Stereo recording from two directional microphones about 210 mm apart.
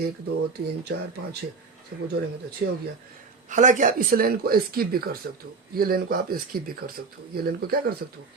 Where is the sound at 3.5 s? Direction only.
35° right (ahead or behind).